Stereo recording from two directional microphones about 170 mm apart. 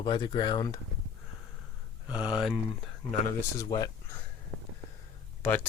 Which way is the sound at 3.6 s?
20° left (ahead or behind).